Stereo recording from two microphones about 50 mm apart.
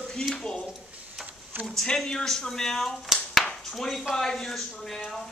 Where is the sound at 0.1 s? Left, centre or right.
Centre.